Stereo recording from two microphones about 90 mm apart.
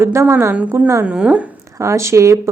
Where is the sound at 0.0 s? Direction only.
30° right (ahead or behind).